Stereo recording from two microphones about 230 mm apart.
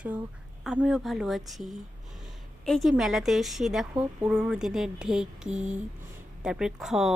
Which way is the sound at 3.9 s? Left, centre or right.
Centre.